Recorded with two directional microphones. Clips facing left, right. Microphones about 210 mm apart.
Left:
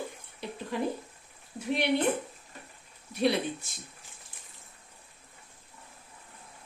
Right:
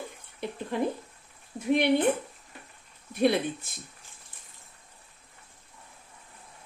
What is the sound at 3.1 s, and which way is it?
Speech, 55° right (ahead or behind).